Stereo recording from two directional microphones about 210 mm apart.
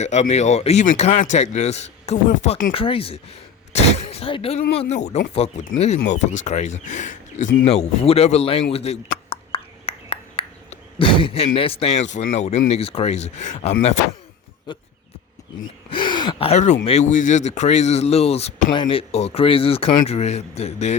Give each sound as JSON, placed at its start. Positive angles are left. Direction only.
{"t": 0.0, "sound": "a man's voice", "side_deg": 35}
{"t": 2.7, "sound": "a man's voice", "side_deg": 25}
{"t": 14.7, "sound": "speech", "side_deg": 20}
{"t": 15.9, "sound": "gasp", "side_deg": 20}
{"t": 16.8, "sound": "a man's voice", "side_deg": 30}